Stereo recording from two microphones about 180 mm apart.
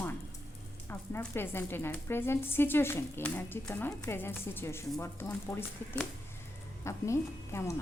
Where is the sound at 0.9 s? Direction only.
10° left (ahead or behind).